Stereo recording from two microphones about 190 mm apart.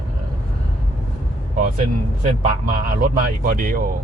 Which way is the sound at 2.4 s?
45° right (ahead or behind).